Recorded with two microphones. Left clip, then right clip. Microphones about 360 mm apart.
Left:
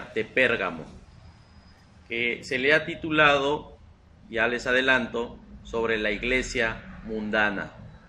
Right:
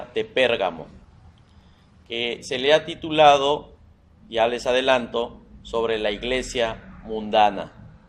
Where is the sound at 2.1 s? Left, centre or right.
Right.